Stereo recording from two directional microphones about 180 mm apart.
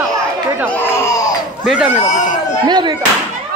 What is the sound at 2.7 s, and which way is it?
Speech, 25° right (ahead or behind).